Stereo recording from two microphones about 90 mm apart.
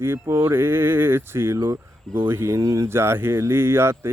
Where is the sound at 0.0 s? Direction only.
30° right (ahead or behind).